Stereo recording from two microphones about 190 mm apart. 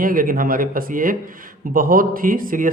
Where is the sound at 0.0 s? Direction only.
45° right (ahead or behind).